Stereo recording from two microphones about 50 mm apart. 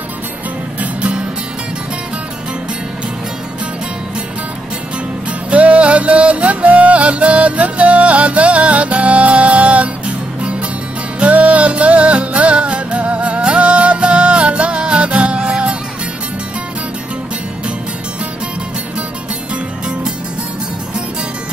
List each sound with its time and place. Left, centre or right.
0.7 s music: right
5.5 s music: right